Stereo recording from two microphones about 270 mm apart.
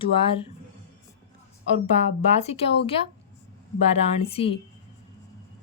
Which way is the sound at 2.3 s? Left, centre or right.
Left.